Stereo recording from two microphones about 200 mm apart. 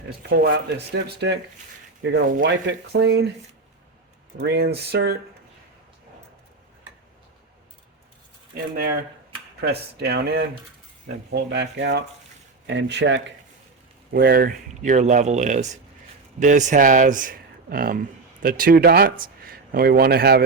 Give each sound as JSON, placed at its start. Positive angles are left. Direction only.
{"t": 0.2, "sound": "speech", "side_deg": -50}
{"t": 4.4, "sound": "speech", "side_deg": -55}
{"t": 9.6, "sound": "speech", "side_deg": -50}
{"t": 14.1, "sound": "speech", "side_deg": -50}